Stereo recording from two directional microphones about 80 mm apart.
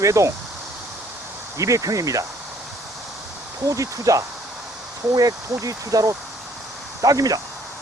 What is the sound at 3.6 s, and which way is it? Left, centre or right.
Speech, right.